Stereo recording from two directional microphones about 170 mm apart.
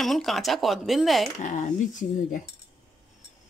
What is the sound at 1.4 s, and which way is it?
Speech, 45° left (ahead or behind).